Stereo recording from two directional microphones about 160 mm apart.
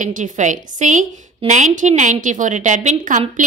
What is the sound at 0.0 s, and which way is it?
A woman's voice, 50° right (ahead or behind).